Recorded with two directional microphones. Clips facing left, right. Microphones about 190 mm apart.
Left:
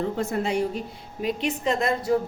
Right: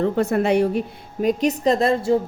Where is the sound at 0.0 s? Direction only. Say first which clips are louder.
Right 7 dB; 65° right (ahead or behind).